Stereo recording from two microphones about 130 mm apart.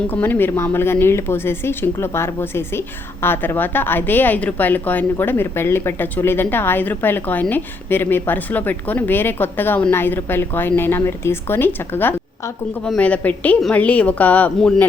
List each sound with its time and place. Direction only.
0.1 s speech: 15° left (ahead or behind)